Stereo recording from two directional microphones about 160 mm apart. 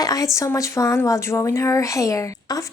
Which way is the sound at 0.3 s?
20° left (ahead or behind).